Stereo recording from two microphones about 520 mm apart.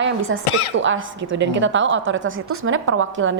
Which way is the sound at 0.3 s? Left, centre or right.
Right.